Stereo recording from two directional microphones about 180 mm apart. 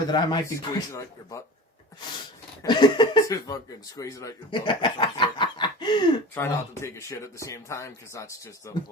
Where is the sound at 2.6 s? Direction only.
25° left (ahead or behind).